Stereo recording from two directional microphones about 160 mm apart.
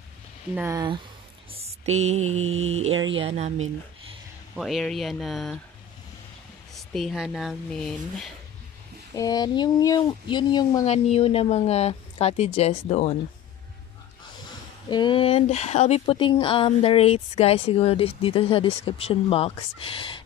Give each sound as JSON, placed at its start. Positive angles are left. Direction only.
{"t": 0.6, "sound": "speech", "side_deg": -20}
{"t": 1.5, "sound": "a sound", "side_deg": -40}
{"t": 2.7, "sound": "speech", "side_deg": -40}
{"t": 4.6, "sound": "speech", "side_deg": 0}
{"t": 6.7, "sound": "speech", "side_deg": 0}
{"t": 9.1, "sound": "speech", "side_deg": 20}
{"t": 10.9, "sound": "speech", "side_deg": 40}
{"t": 14.9, "sound": "speech", "side_deg": 30}